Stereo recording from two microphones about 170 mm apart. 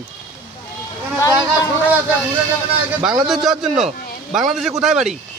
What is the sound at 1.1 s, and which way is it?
Speech, 20° left (ahead or behind).